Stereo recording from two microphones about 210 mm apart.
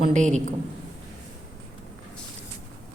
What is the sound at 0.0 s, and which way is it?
Speech, 35° right (ahead or behind).